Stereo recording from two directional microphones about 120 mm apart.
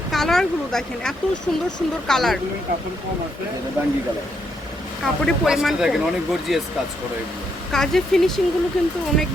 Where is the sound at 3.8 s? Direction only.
20° right (ahead or behind).